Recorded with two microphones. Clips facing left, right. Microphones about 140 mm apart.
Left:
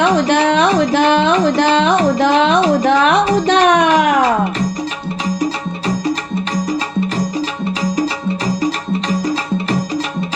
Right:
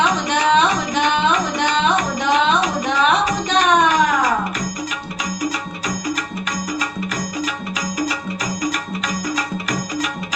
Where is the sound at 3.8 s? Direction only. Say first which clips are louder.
Left 4 dB; 65° left (ahead or behind).